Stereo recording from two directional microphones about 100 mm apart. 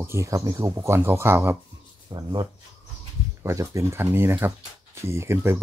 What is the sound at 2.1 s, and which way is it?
Speech, 45° right (ahead or behind).